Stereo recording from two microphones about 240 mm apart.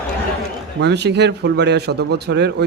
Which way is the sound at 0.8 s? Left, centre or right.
Right.